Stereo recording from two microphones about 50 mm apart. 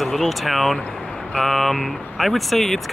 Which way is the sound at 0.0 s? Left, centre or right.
Centre.